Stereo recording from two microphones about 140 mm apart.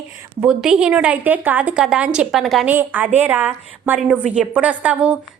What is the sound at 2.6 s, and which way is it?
A woman's voice, 10° right (ahead or behind).